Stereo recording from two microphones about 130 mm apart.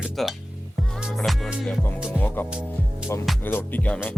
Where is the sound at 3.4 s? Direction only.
15° left (ahead or behind).